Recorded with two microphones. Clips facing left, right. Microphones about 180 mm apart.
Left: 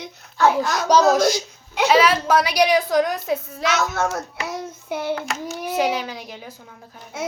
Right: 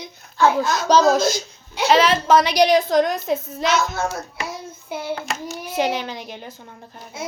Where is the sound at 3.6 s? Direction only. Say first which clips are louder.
Right 1 dB; 75° left (ahead or behind).